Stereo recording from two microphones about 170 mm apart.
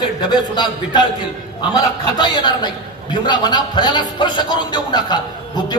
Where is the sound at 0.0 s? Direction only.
25° left (ahead or behind).